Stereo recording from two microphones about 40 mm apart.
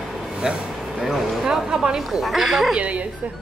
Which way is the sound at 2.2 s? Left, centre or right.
Centre.